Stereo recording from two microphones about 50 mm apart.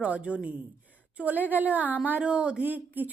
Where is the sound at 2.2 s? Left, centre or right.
Right.